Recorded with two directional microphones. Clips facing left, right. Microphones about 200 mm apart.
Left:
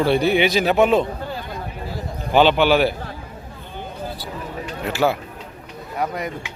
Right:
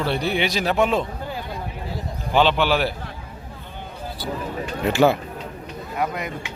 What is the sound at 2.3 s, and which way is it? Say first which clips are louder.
Speech: left 4 dB; 5° left (ahead or behind).